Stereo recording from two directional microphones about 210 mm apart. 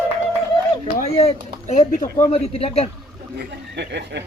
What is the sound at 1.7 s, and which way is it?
Speech, 35° left (ahead or behind).